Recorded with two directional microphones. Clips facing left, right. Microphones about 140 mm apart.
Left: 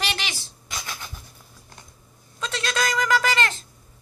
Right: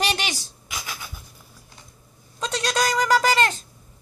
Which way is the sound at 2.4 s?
35° right (ahead or behind).